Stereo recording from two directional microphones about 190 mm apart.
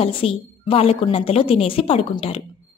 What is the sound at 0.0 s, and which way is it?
A woman's voice, 30° left (ahead or behind).